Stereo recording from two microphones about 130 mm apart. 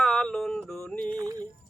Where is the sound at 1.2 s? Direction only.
30° right (ahead or behind).